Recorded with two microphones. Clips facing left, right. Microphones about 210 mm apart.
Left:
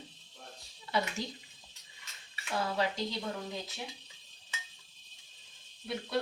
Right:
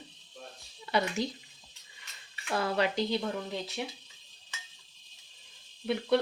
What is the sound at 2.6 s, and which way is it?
Speech, 70° right (ahead or behind).